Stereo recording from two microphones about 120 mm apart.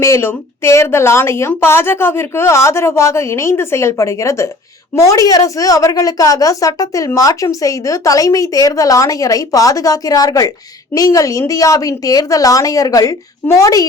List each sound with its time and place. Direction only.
0.0 s speech: 20° left (ahead or behind)